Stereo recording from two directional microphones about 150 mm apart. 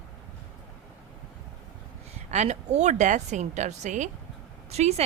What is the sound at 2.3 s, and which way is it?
Speech, 50° right (ahead or behind).